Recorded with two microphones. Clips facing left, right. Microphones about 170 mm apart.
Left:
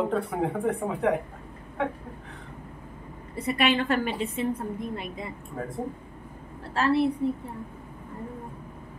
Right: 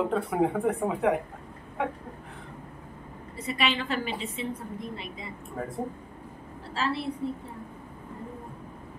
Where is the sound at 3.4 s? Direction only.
55° left (ahead or behind).